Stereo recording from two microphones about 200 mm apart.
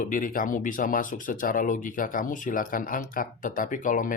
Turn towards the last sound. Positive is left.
turn(degrees=40)  # may be behind; listen again after turning